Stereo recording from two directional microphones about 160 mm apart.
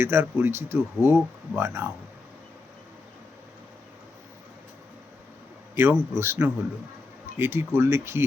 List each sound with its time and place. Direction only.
0.0 s speech: 15° right (ahead or behind)
5.7 s speech: 15° right (ahead or behind)